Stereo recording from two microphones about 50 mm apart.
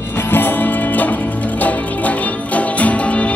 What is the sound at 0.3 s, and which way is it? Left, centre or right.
Music, left.